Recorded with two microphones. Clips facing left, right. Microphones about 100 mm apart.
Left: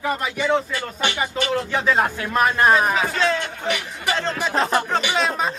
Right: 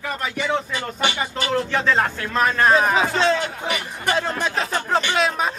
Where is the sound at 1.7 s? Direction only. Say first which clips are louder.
Even; 10° left (ahead or behind).